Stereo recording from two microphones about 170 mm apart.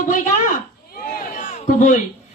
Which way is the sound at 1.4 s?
45° left (ahead or behind).